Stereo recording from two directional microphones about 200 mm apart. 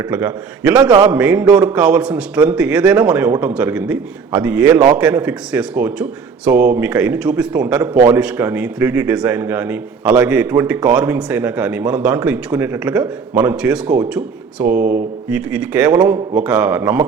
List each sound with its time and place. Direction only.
0.1 s speech: 5° right (ahead or behind)
0.9 s a man's voice: 20° right (ahead or behind)
1.1 s a man's voice: 5° right (ahead or behind)